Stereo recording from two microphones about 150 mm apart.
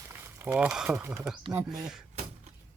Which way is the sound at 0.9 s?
15° right (ahead or behind).